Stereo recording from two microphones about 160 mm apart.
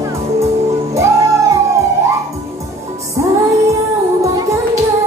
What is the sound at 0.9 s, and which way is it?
Music, 20° right (ahead or behind).